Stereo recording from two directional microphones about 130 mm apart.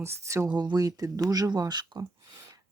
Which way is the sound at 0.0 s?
20° right (ahead or behind).